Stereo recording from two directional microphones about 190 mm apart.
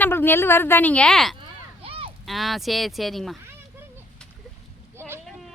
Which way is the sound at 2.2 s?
Centre (ahead or behind).